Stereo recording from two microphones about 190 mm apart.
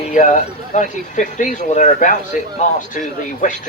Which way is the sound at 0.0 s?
40° left (ahead or behind).